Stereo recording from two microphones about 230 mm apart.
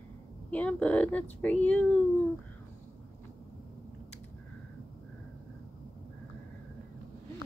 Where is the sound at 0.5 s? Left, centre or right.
Centre.